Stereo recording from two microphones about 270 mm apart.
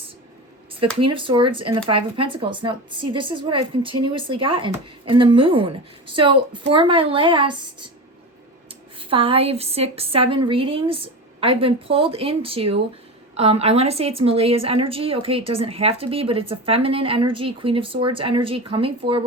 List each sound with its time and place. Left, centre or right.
0.9 s a woman's voice: centre
9.0 s a woman's voice: centre